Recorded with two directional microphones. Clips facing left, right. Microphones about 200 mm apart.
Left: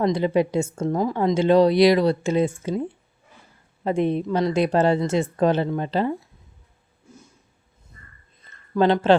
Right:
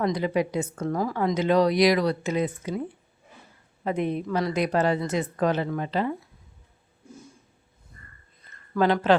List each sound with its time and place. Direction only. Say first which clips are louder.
0.0 s a woman's voice: left 4 dB; 25° left (ahead or behind)
3.8 s a woman's voice: left 5 dB; 30° left (ahead or behind)
8.7 s speech: left 4 dB; 25° left (ahead or behind)